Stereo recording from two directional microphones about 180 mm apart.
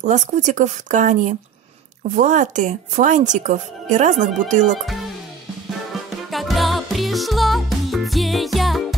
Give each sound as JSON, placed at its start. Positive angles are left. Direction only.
{"t": 0.0, "sound": "speech", "side_deg": -40}
{"t": 6.3, "sound": "music", "side_deg": 0}